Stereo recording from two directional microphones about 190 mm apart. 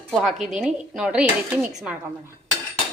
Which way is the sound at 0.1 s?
Centre (ahead or behind).